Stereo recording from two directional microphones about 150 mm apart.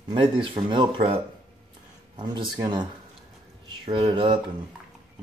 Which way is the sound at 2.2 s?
30° right (ahead or behind).